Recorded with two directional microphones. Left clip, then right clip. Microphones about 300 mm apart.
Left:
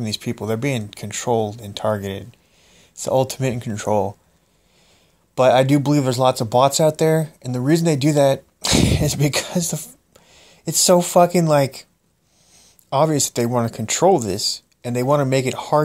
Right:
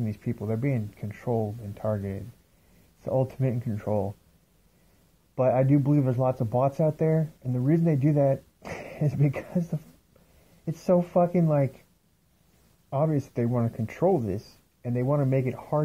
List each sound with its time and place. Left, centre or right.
0.0 s speech: centre
5.3 s speech: centre
12.9 s speech: left